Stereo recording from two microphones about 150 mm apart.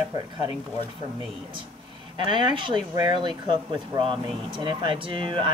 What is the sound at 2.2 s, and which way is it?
Speech, 35° right (ahead or behind).